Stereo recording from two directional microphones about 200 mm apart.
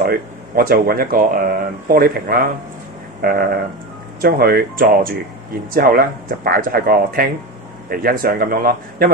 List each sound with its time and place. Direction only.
0.0 s speech: 50° right (ahead or behind)